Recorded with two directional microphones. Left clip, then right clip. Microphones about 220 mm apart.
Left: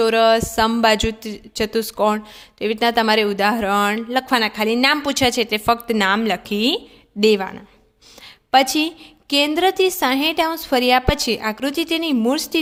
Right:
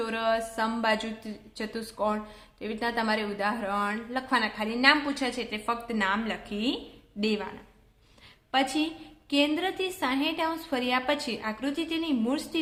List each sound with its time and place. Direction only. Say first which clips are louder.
0.0 s a woman's voice: left 13 dB; 45° left (ahead or behind)